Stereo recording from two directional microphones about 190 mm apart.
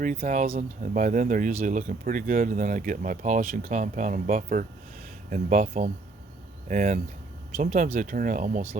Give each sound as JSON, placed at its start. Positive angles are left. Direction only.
{"t": 0.0, "sound": "speech", "side_deg": -45}